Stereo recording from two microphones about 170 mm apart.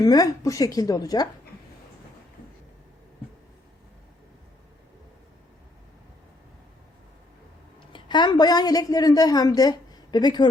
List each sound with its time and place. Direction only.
0.0 s a woman's voice: 20° left (ahead or behind)
7.9 s a woman's voice: 25° left (ahead or behind)